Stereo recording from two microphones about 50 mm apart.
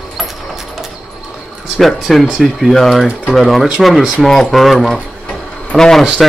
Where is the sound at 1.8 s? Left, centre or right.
Centre.